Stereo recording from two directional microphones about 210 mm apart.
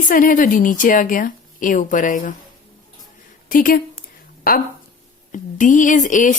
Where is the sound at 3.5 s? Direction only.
40° left (ahead or behind).